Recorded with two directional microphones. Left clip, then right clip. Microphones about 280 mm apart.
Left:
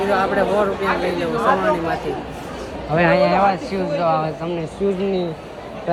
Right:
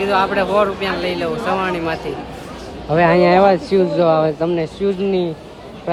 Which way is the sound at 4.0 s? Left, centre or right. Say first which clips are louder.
Right 5 dB; right.